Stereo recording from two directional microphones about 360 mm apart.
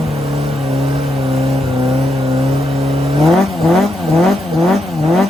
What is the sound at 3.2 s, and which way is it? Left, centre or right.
Vehicle, centre.